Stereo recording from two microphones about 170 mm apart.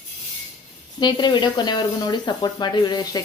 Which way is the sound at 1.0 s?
25° left (ahead or behind).